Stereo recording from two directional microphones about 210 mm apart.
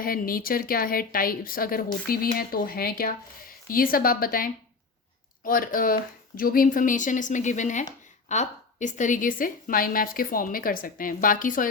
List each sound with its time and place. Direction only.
0.0 s a woman's voice: 45° left (ahead or behind)